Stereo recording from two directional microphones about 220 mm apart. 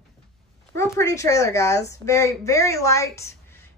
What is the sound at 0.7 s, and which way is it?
A woman's voice, 15° left (ahead or behind).